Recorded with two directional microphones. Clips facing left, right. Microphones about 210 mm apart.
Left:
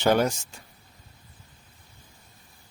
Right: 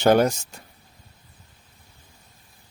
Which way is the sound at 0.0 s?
45° right (ahead or behind).